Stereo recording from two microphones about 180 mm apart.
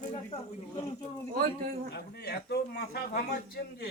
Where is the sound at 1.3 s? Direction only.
55° right (ahead or behind).